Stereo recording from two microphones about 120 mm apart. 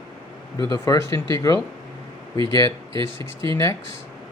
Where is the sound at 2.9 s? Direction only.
45° right (ahead or behind).